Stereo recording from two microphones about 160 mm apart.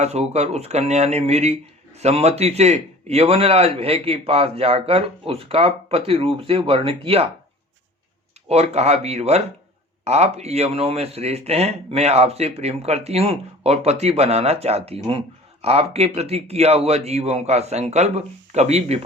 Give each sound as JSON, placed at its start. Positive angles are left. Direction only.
{"t": 0.0, "sound": "a man's voice", "side_deg": -40}
{"t": 8.4, "sound": "a man's voice", "side_deg": -40}